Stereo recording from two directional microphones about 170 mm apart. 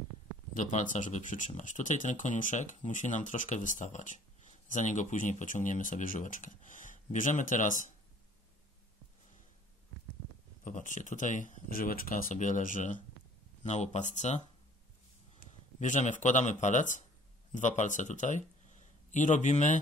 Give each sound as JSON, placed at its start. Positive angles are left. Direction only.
{"t": 0.6, "sound": "speech", "side_deg": 50}
{"t": 10.6, "sound": "speech", "side_deg": 50}
{"t": 15.8, "sound": "speech", "side_deg": 45}